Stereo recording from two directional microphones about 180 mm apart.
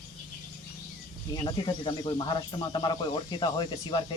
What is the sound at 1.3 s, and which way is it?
Speech, 25° left (ahead or behind).